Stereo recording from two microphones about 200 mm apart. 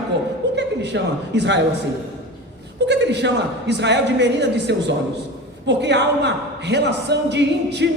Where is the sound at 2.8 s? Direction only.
60° right (ahead or behind).